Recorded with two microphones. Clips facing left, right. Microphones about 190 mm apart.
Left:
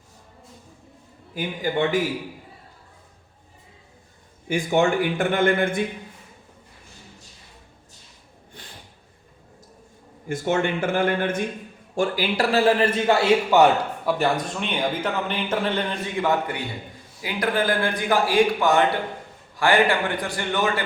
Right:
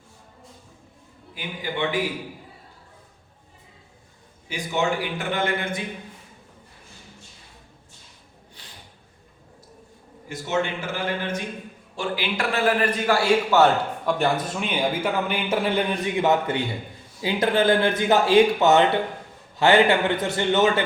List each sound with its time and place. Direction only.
1.3 s a man's voice: 45° left (ahead or behind)
4.4 s a man's voice: 50° left (ahead or behind)
8.6 s snort: 50° left (ahead or behind)
10.2 s a man's voice: 50° left (ahead or behind)
11.9 s a man's voice: 40° left (ahead or behind); by 20.8 s 25° right (ahead or behind)